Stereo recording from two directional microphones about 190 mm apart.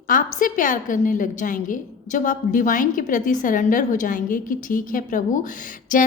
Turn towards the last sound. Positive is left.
turn(degrees=45)  # may be behind; listen again after turning